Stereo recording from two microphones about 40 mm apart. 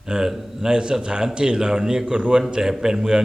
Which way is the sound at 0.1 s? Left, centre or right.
Centre.